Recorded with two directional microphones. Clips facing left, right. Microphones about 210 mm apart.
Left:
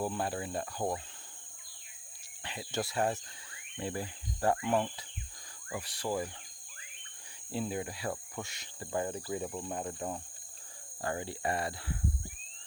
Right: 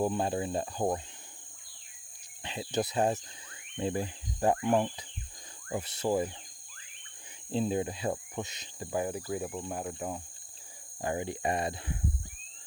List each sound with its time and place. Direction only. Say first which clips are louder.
0.0 s insect: right 5 dB; 20° right (ahead or behind)
2.4 s speech: right 5 dB; 20° right (ahead or behind)
3.8 s insect: right 5 dB; 20° right (ahead or behind)
7.5 s insect: right 6 dB; 25° right (ahead or behind)
8.9 s speech: right 2 dB; 10° right (ahead or behind)
11.0 s insect: right 3 dB; 20° right (ahead or behind)